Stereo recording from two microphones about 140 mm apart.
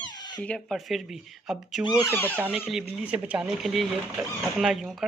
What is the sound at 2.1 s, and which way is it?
Speech, 15° left (ahead or behind).